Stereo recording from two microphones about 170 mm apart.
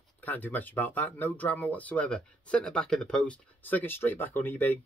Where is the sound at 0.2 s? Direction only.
10° left (ahead or behind).